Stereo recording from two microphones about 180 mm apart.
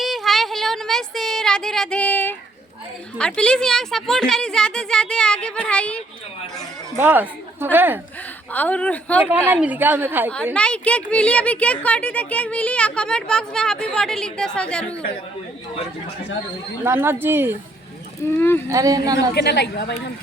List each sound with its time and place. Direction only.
0.0 s a sound: centre (ahead or behind)
3.2 s speech: 5° left (ahead or behind)
6.9 s a woman's voice: 10° right (ahead or behind)
8.5 s a woman's voice: 10° left (ahead or behind)
9.2 s a woman's voice: 10° right (ahead or behind)
10.5 s speech: 5° left (ahead or behind)
16.8 s a woman's voice: 15° right (ahead or behind)
18.3 s a woman's voice: 10° left (ahead or behind)
18.7 s speech: 20° right (ahead or behind)
19.3 s a woman's voice: 70° left (ahead or behind)